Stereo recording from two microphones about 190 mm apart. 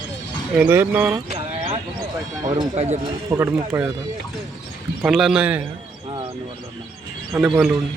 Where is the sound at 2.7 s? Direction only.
35° right (ahead or behind).